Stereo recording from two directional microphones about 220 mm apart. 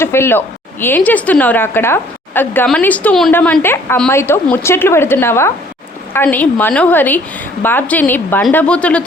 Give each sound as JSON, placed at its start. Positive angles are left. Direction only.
{"t": 0.0, "sound": "a woman's voice", "side_deg": 10}